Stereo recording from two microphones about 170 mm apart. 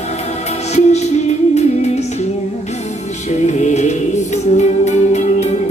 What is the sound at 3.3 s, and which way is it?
Music, 45° left (ahead or behind).